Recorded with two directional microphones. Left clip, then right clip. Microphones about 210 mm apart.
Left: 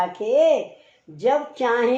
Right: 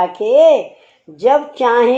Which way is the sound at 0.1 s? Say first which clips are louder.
Right 9 dB; 35° right (ahead or behind).